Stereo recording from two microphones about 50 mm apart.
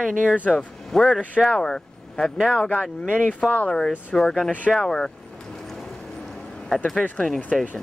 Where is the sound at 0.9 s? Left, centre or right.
Centre.